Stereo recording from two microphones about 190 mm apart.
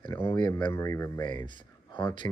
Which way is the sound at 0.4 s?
25° left (ahead or behind).